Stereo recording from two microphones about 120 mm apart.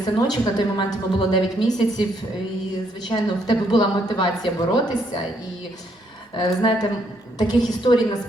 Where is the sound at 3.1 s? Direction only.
40° left (ahead or behind).